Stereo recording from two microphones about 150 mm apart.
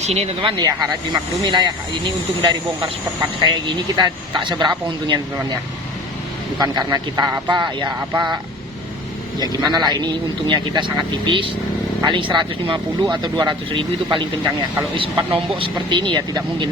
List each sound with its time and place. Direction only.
0.0 s speech: 45° right (ahead or behind)
0.6 s speech: 25° right (ahead or behind)
6.6 s speech: 25° right (ahead or behind)
9.4 s speech: 25° right (ahead or behind)
15.3 s speech: 35° right (ahead or behind)